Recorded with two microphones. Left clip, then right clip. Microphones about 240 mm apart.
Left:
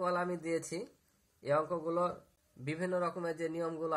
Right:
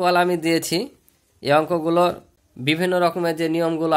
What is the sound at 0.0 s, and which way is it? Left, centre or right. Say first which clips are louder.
Speech: right 16 dB; right.